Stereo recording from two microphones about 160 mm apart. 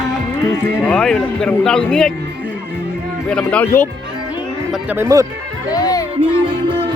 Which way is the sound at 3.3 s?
5° left (ahead or behind).